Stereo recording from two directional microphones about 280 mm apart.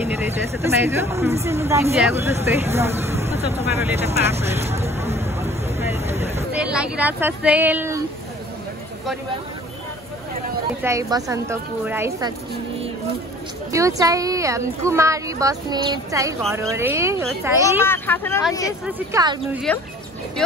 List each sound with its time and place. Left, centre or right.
0.1 s speech: centre
3.3 s speech: right
3.7 s speech: centre
5.1 s hubbub: centre
6.5 s speech: centre
10.8 s speech: centre
13.7 s speech: centre
17.8 s speech: centre
18.9 s speech: centre